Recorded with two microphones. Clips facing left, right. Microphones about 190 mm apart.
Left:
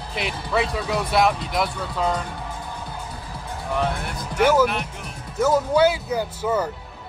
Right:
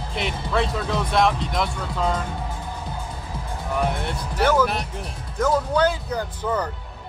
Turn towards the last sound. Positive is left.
turn(degrees=5)  # may be behind; listen again after turning